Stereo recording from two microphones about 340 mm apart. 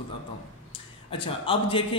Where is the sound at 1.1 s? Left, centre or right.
Centre.